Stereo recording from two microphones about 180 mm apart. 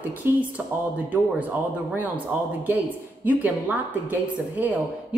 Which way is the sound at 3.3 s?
10° right (ahead or behind).